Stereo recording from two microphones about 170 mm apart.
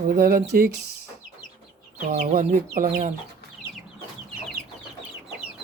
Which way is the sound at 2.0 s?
55° right (ahead or behind).